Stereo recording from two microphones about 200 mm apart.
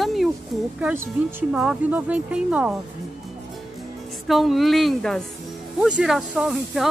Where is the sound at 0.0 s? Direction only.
Centre (ahead or behind).